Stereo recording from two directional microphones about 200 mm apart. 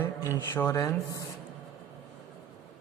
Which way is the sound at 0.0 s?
15° left (ahead or behind).